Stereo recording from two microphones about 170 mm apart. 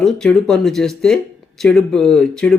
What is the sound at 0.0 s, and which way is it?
Speech, 5° left (ahead or behind).